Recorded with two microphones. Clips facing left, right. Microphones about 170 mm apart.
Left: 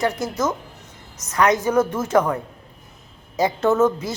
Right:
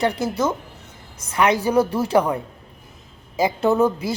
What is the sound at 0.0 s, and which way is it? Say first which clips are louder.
Speech: right 1 dB; 30° right (ahead or behind).